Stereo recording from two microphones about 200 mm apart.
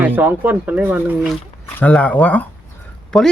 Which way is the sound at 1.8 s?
5° left (ahead or behind).